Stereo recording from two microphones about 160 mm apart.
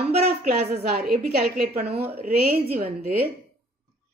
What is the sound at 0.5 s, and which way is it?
Speech, 80° right.